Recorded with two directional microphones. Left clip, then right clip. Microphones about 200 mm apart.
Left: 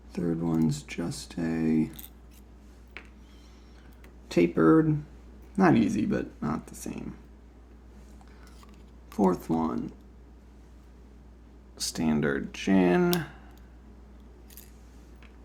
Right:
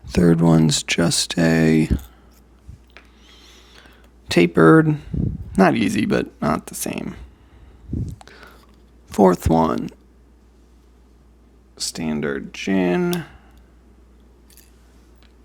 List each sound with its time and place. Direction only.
0.1 s speech: 50° right (ahead or behind)
3.2 s a sound: 50° right (ahead or behind)
4.3 s speech: 50° right (ahead or behind)
9.1 s speech: 50° right (ahead or behind)
11.8 s speech: 20° right (ahead or behind)